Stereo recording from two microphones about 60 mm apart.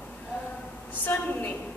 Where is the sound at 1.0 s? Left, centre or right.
Left.